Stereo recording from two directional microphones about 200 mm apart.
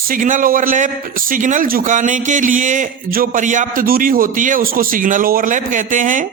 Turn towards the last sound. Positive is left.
turn(degrees=-40)  # may be behind; listen again after turning